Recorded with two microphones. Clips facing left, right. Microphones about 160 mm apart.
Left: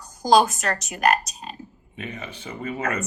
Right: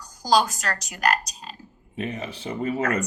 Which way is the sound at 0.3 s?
25° left (ahead or behind).